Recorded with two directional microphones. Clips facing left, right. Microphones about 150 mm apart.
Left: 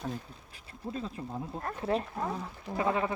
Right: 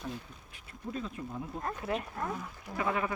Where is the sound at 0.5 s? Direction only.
30° left (ahead or behind).